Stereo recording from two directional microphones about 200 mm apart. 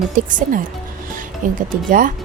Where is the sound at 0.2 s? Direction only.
40° right (ahead or behind).